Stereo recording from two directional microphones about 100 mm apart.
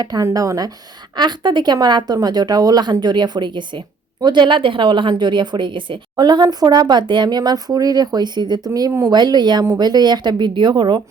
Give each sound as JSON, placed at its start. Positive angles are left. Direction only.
{"t": 0.0, "sound": "speech", "side_deg": -40}
{"t": 1.1, "sound": "speech", "side_deg": -45}